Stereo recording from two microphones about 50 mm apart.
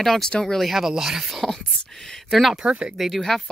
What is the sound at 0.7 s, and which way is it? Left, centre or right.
Speech, centre.